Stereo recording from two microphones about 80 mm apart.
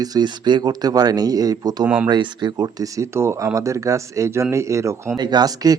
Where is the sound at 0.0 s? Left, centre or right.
Right.